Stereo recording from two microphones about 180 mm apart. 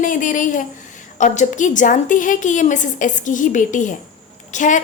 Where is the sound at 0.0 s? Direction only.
45° left (ahead or behind).